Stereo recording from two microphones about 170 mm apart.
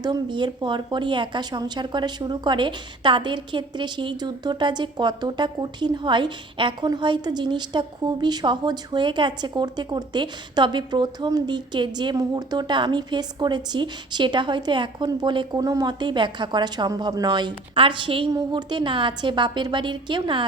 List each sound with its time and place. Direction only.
0.0 s speech: 25° right (ahead or behind)